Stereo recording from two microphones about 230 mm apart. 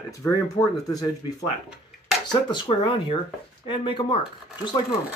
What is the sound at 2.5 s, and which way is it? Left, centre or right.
Speech, centre.